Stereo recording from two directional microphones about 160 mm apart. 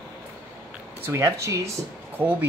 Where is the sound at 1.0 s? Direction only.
15° right (ahead or behind).